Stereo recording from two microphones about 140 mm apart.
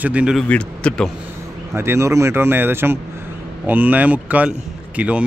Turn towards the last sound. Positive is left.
turn(degrees=-10)  # may be behind; listen again after turning